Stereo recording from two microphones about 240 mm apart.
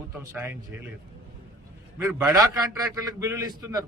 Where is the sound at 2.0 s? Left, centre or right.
Centre.